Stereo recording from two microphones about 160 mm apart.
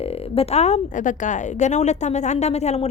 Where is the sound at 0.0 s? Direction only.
40° left (ahead or behind).